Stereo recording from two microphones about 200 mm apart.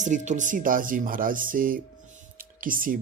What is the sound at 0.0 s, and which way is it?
Speech, 35° right (ahead or behind).